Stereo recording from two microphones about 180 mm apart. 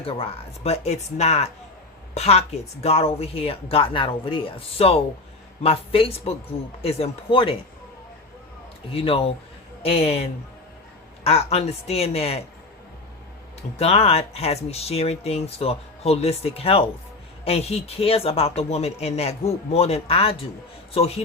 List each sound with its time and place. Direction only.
0.0 s speech: 30° left (ahead or behind)
8.9 s speech: 30° left (ahead or behind)
13.7 s speech: 35° left (ahead or behind)